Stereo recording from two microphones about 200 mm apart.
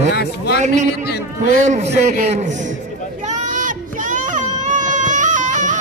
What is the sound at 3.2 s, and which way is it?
Child singing, 35° right (ahead or behind).